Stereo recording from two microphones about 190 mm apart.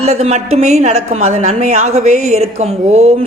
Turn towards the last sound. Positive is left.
turn(degrees=-30)  # may be behind; listen again after turning